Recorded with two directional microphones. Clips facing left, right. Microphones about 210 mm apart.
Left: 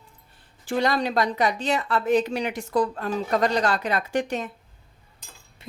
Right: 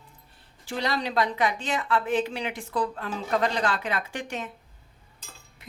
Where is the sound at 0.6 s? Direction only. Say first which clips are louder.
Left 5 dB; 50° left (ahead or behind).